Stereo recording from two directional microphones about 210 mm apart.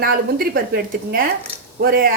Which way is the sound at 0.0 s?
45° right (ahead or behind).